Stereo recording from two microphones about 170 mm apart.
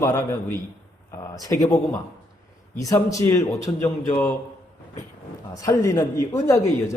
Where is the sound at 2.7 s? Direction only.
20° left (ahead or behind).